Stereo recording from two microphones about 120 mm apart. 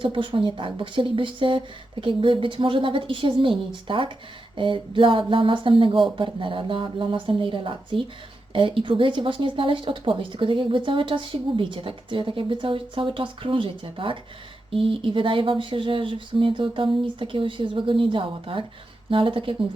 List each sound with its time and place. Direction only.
0.0 s speech: 45° right (ahead or behind)